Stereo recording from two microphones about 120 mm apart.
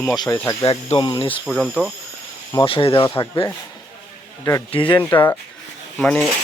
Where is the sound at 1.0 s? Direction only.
40° left (ahead or behind).